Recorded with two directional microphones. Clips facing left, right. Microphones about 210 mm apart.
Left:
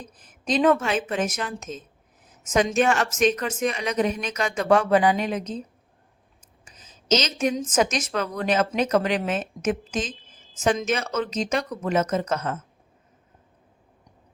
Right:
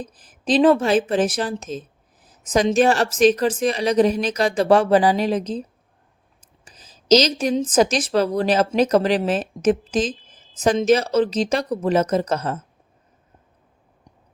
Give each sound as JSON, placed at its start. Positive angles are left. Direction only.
{"t": 0.0, "sound": "speech", "side_deg": -35}
{"t": 6.7, "sound": "speech", "side_deg": -35}